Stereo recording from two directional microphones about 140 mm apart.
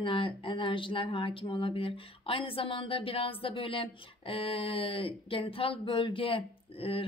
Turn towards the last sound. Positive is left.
turn(degrees=40)  # may be behind; listen again after turning